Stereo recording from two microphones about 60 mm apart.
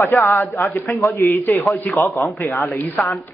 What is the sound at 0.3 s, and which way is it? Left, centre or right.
Speech, left.